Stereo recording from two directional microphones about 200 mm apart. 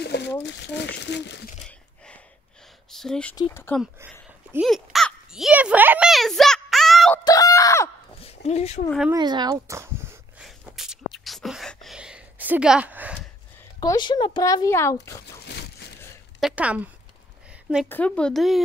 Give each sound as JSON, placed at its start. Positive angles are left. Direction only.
{"t": 0.0, "sound": "a sound", "side_deg": 55}
{"t": 0.4, "sound": "speech", "side_deg": 60}
{"t": 2.9, "sound": "speech", "side_deg": 0}
{"t": 3.3, "sound": "speech", "side_deg": 15}
{"t": 3.8, "sound": "a sound", "side_deg": -10}
{"t": 4.6, "sound": "a child's voice", "side_deg": 0}
{"t": 7.2, "sound": "screaming", "side_deg": 15}
{"t": 8.2, "sound": "a sound", "side_deg": 30}
{"t": 9.1, "sound": "speech", "side_deg": -20}
{"t": 10.4, "sound": "a sound", "side_deg": 0}
{"t": 13.7, "sound": "speech", "side_deg": 20}
{"t": 16.3, "sound": "a woman's voice", "side_deg": -5}
{"t": 17.8, "sound": "speech", "side_deg": 10}